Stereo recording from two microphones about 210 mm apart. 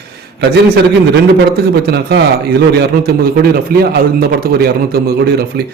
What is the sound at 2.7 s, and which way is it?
A man's voice, 50° right (ahead or behind).